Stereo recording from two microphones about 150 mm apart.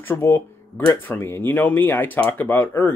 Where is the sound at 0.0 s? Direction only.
15° left (ahead or behind).